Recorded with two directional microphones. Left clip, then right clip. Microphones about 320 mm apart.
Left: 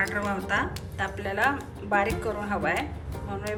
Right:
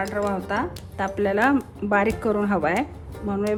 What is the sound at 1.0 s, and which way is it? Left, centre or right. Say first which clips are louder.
Speech: right 5 dB; centre.